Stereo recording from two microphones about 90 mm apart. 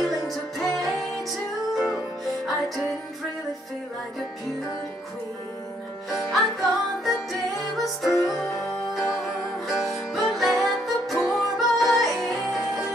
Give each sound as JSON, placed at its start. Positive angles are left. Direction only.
{"t": 0.6, "sound": "music", "side_deg": 0}
{"t": 6.0, "sound": "music", "side_deg": 0}